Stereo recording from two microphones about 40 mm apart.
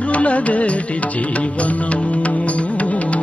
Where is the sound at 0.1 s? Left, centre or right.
Left.